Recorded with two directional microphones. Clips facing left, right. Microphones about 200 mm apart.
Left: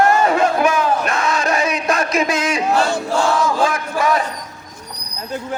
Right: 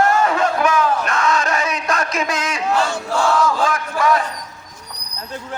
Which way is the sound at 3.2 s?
20° left (ahead or behind).